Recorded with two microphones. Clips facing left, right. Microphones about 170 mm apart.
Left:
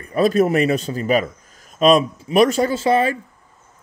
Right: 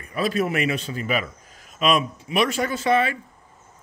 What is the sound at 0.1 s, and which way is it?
A man's voice, 45° left (ahead or behind).